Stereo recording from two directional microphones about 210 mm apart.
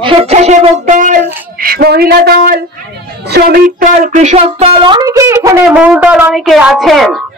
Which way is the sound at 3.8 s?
40° right (ahead or behind).